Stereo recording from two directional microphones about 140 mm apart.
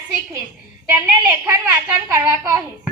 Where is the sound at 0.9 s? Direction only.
20° right (ahead or behind).